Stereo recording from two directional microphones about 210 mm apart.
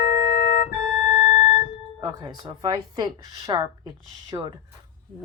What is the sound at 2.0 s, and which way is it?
Speech, 20° right (ahead or behind).